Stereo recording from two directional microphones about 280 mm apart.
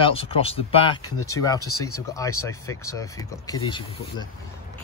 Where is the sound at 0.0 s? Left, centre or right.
Centre.